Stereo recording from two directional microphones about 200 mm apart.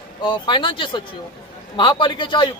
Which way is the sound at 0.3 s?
25° left (ahead or behind).